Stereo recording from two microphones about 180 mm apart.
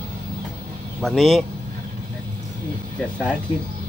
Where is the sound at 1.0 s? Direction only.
Centre (ahead or behind).